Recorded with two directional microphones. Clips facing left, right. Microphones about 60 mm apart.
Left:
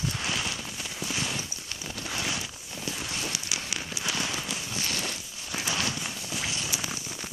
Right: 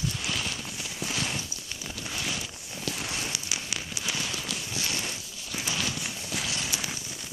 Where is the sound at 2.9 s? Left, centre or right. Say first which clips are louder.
Right 2 dB; left.